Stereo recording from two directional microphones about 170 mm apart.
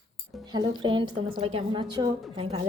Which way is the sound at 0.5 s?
25° right (ahead or behind).